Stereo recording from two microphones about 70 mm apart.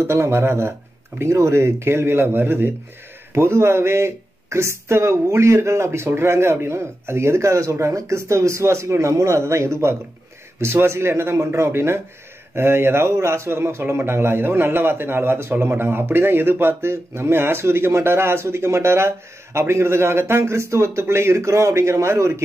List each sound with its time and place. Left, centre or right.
0.0 s a man's voice: right